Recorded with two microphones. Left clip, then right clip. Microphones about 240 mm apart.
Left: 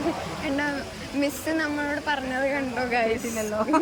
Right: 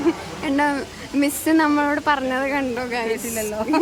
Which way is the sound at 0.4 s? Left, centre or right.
Centre.